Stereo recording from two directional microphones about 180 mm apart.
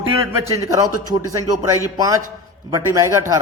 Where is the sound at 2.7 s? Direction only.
20° right (ahead or behind).